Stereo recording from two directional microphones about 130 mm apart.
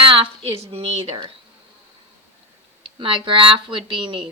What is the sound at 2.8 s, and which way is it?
Speech, 40° right (ahead or behind).